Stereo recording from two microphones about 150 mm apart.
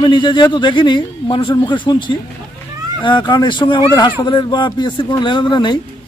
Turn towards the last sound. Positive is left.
turn(degrees=30)  # may be behind; listen again after turning